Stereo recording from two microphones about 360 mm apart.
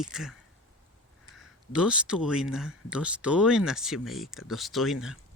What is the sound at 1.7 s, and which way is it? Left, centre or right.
Speech, centre.